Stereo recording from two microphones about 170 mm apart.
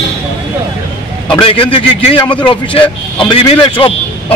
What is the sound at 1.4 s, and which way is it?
A man's voice, 30° left (ahead or behind).